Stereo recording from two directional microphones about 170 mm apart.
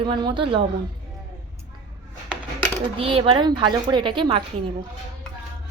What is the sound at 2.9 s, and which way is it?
A woman's voice, 30° right (ahead or behind).